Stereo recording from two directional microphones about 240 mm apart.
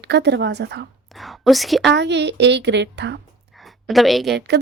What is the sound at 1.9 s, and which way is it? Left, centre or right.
Speech, right.